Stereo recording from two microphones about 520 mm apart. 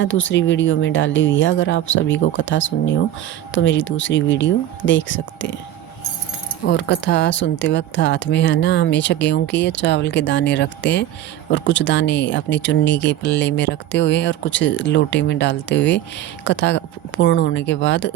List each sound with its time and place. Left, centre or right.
0.0 s speech: left
6.7 s speech: centre